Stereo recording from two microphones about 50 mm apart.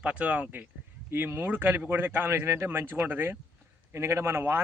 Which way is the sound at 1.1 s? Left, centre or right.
Right.